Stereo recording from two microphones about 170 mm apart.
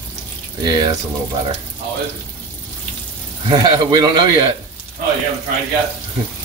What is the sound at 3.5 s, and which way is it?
Speech, 25° right (ahead or behind).